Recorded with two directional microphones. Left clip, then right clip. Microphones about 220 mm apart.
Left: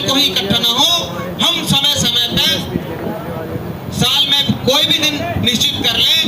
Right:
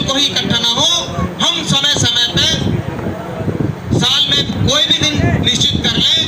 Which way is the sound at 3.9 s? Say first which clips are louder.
Even; 30° left (ahead or behind).